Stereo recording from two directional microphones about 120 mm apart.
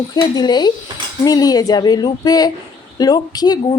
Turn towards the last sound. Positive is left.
turn(degrees=35)  # may be behind; listen again after turning